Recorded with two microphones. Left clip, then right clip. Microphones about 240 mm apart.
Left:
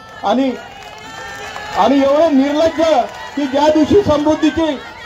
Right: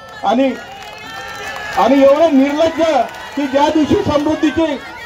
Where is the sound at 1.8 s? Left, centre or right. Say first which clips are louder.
Right 2 dB; left.